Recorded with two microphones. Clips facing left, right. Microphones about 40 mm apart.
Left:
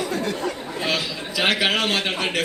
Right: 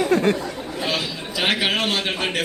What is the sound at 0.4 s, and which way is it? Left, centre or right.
Chatter, left.